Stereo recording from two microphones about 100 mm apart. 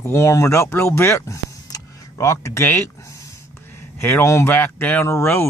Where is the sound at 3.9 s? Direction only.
25° left (ahead or behind).